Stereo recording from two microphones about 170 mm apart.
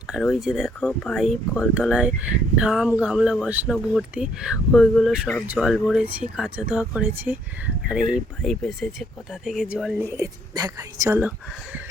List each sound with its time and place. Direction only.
0.1 s speech: centre (ahead or behind)
10.1 s speech: 20° right (ahead or behind)